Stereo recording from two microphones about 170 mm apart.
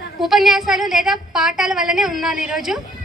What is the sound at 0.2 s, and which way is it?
A woman's voice, centre (ahead or behind).